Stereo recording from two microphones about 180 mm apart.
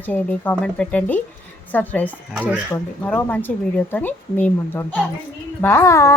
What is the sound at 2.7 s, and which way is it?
Speech, 10° left (ahead or behind).